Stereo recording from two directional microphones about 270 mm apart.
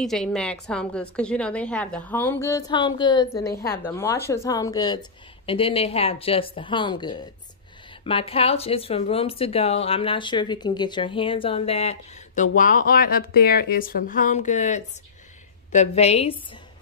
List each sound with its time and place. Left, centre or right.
0.0 s a woman's voice: centre; by 16.3 s left